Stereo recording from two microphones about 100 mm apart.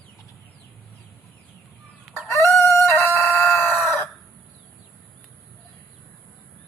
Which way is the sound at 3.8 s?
25° left (ahead or behind).